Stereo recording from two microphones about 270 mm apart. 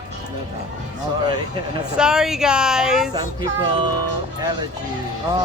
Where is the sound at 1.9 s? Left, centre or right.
Centre.